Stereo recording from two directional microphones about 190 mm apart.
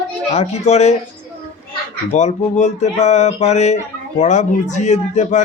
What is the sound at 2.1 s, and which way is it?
Speech, 40° left (ahead or behind).